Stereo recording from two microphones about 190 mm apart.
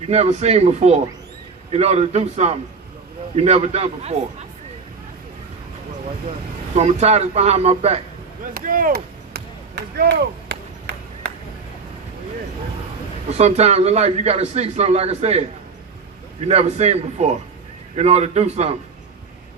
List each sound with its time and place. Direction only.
0.1 s a man's voice: 35° right (ahead or behind)
6.7 s a man's voice: 35° right (ahead or behind)
8.5 s chop: 45° right (ahead or behind)
13.3 s a man's voice: 35° right (ahead or behind)